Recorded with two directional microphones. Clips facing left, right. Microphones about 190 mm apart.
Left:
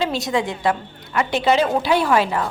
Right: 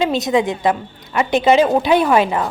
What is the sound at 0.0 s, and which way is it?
A woman's voice, 20° right (ahead or behind).